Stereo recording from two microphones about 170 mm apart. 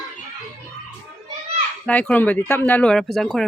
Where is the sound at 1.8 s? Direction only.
10° left (ahead or behind).